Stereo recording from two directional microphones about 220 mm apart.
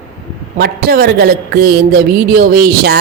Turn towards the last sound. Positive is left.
turn(degrees=-45)  # may be behind; listen again after turning